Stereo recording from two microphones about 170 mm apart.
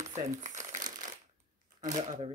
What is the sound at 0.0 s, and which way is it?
Crumpling, 45° right (ahead or behind).